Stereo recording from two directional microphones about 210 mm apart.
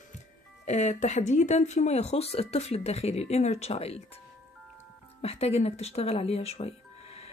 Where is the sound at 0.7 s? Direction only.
35° left (ahead or behind).